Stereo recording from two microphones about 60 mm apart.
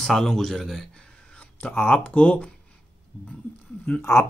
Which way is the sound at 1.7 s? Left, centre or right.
Left.